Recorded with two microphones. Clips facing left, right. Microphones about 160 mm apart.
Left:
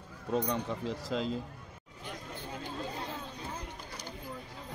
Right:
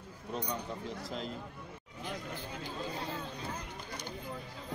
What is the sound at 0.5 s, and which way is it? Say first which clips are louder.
Speech: left 5 dB; 90° left.